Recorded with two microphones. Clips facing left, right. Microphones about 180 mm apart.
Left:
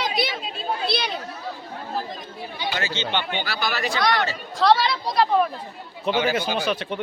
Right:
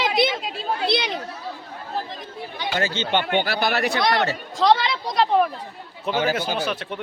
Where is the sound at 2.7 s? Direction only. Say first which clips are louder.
Right 5 dB; 50° right (ahead or behind).